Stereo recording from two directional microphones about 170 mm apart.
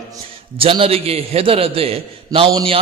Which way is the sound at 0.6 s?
35° right (ahead or behind).